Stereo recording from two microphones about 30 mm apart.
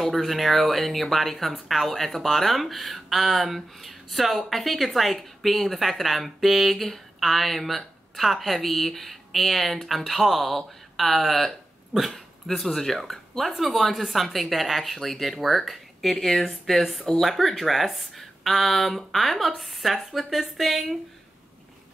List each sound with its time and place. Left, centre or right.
0.2 s speech: centre
1.5 s speech: centre
1.9 s speech: centre
11.9 s speech: centre
12.6 s speech: centre